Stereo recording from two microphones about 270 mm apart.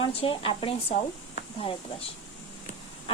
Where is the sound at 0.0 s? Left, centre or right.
Left.